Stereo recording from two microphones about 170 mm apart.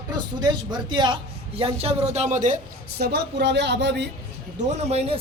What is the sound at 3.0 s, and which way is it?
Speech, 75° right (ahead or behind).